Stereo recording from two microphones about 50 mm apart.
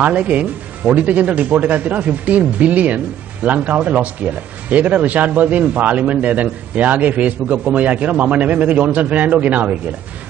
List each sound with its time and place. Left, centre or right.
0.0 s speech: right